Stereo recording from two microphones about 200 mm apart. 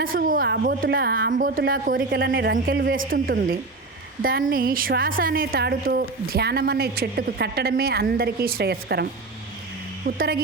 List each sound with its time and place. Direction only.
0.0 s a woman's voice: 45° right (ahead or behind)
10.2 s a woman's voice: 50° right (ahead or behind)